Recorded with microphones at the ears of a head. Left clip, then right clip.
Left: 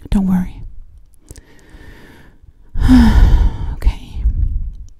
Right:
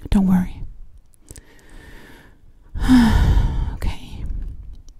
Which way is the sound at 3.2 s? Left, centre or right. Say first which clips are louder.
Left 2 dB; centre.